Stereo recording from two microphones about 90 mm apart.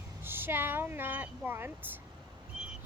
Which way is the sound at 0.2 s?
25° right (ahead or behind).